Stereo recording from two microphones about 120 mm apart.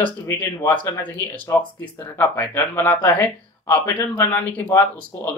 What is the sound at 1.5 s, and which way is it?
Speech, 15° left (ahead or behind).